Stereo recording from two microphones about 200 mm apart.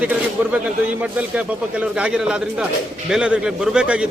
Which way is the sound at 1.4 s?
5° right (ahead or behind).